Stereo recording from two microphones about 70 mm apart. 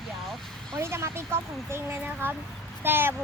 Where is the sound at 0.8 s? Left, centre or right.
Right.